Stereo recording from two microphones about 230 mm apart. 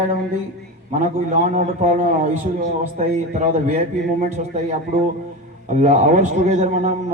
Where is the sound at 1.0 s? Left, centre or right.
Right.